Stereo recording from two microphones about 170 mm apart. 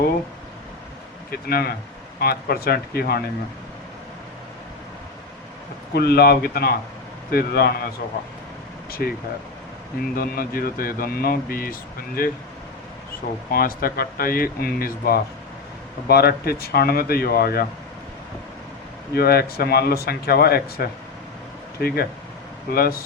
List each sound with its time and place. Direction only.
1.3 s speech: 65° left (ahead or behind)
5.9 s speech: 70° left (ahead or behind)
8.9 s speech: 60° left (ahead or behind)
10.2 s speech: 60° left (ahead or behind)
13.5 s speech: 60° left (ahead or behind)
19.1 s speech: 65° left (ahead or behind)